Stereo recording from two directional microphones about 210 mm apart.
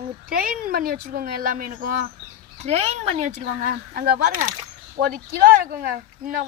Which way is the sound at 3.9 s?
45° right (ahead or behind).